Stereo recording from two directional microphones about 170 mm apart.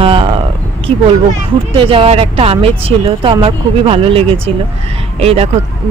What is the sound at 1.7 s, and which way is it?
Speech, 30° right (ahead or behind).